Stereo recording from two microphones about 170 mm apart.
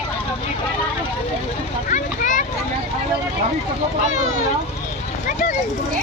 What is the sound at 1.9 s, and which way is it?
Children playing, 50° left (ahead or behind).